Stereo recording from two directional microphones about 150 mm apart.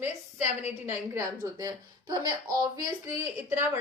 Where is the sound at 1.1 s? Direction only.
20° right (ahead or behind).